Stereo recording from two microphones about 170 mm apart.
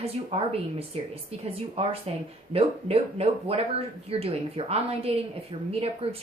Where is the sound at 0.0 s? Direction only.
35° right (ahead or behind).